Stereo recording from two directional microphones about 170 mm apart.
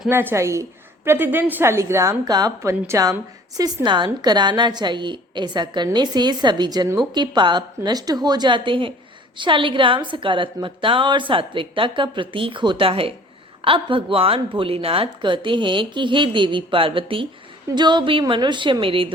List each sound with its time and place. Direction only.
0.1 s a woman's voice: 15° right (ahead or behind); by 19.1 s 30° right (ahead or behind)